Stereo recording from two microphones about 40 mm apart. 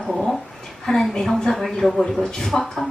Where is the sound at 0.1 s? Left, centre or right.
Centre.